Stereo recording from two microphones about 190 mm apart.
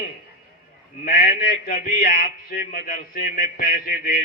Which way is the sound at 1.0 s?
50° left (ahead or behind).